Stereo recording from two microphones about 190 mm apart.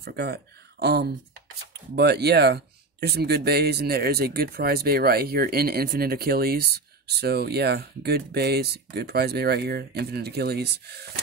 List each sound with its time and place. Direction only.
0.0 s speech: 55° right (ahead or behind)